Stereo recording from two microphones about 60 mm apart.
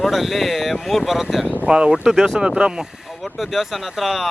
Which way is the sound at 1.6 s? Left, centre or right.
Centre.